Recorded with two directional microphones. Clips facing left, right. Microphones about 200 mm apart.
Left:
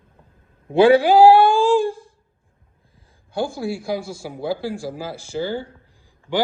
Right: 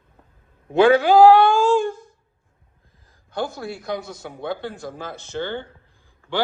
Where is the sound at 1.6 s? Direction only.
30° left (ahead or behind).